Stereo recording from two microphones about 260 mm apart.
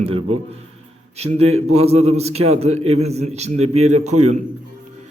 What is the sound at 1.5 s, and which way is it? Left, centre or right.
Speech, right.